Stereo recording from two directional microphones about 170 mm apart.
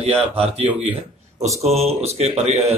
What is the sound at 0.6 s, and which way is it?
Speech, 10° right (ahead or behind).